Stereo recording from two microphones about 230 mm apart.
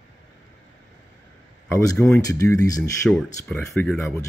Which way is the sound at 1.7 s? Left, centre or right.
Centre.